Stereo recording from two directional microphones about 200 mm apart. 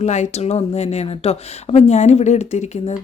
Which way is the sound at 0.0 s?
35° left (ahead or behind).